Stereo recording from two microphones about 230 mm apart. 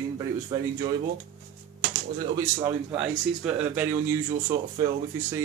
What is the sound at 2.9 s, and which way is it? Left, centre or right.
Speech, centre.